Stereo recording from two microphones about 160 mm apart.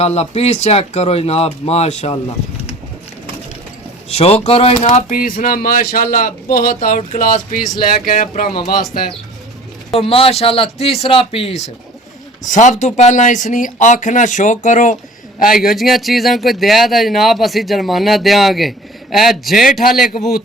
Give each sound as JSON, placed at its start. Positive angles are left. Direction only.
{"t": 0.0, "sound": "speech", "side_deg": 40}
{"t": 4.1, "sound": "speech", "side_deg": 40}
{"t": 5.0, "sound": "speech", "side_deg": 60}
{"t": 9.9, "sound": "speech", "side_deg": 35}
{"t": 12.5, "sound": "speech", "side_deg": 50}
{"t": 15.5, "sound": "speech", "side_deg": 0}